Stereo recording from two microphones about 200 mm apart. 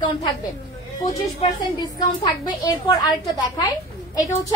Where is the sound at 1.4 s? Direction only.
20° left (ahead or behind).